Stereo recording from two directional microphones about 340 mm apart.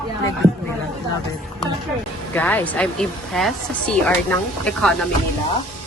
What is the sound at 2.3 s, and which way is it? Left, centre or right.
Speech, centre.